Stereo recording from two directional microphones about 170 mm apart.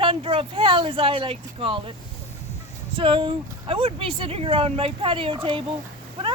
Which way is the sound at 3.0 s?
30° right (ahead or behind).